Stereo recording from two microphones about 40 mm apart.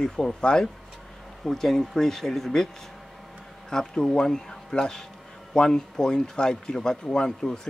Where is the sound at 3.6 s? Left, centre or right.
Centre.